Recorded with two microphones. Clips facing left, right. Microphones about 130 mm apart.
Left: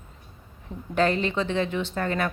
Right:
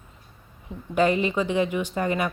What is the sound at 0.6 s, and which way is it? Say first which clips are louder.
A woman's voice: right 2 dB; 10° right (ahead or behind).